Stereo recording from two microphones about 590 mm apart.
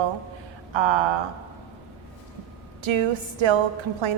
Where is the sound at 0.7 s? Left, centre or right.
Right.